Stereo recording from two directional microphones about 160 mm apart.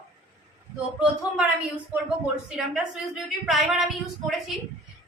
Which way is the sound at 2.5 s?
5° right (ahead or behind).